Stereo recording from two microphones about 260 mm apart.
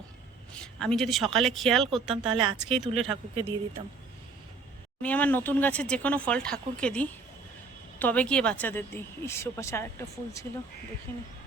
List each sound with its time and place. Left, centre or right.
0.5 s speech: centre
2.2 s speech: right
2.6 s speech: centre
3.1 s speech: right
5.0 s a woman's voice: centre